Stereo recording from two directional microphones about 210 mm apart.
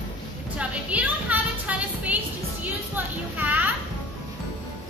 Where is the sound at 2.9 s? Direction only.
10° right (ahead or behind).